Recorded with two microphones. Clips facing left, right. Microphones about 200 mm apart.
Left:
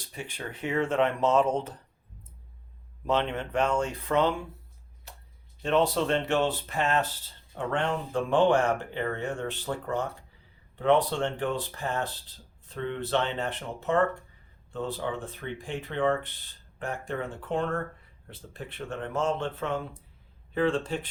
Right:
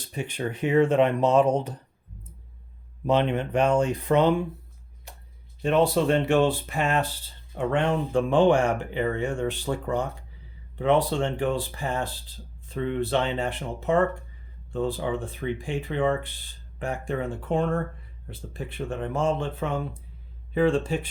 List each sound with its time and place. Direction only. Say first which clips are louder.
0.0 s speech: right 8 dB; 20° right (ahead or behind)
3.1 s speech: right 5 dB; 15° right (ahead or behind)
5.1 s a sound: right 2 dB; 15° right (ahead or behind)
5.6 s speech: right 4 dB; 10° right (ahead or behind)